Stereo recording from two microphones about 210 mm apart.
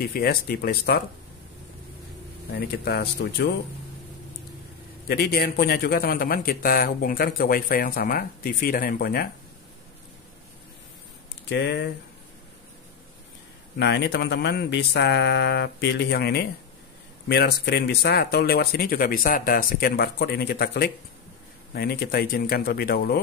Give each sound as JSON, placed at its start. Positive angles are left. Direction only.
{"t": 0.0, "sound": "a man's voice", "side_deg": 45}
{"t": 2.5, "sound": "a man's voice", "side_deg": 50}
{"t": 5.0, "sound": "a man's voice", "side_deg": 50}
{"t": 11.4, "sound": "speech", "side_deg": 55}
{"t": 13.7, "sound": "a man's voice", "side_deg": 55}